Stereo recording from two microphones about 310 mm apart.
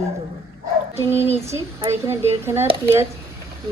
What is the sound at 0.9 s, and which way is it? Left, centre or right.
Speech, centre.